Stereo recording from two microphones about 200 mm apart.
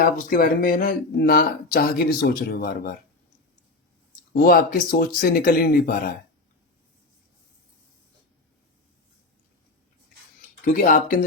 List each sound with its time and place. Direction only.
0.0 s speech: 45° left (ahead or behind)
4.4 s speech: 45° left (ahead or behind)
10.6 s speech: 45° left (ahead or behind)